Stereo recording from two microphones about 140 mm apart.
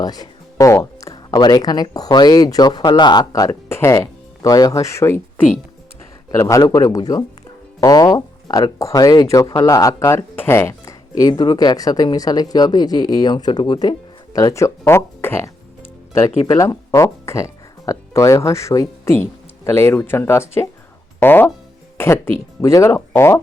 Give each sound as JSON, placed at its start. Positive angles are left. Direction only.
{"t": 0.0, "sound": "speech", "side_deg": 25}
{"t": 6.3, "sound": "speech", "side_deg": 20}